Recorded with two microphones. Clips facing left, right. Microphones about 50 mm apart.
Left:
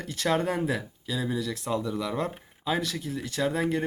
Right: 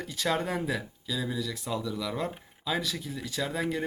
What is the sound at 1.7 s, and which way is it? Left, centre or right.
Speech, left.